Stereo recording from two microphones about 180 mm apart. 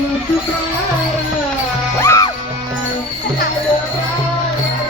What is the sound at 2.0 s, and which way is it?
Music, 15° left (ahead or behind).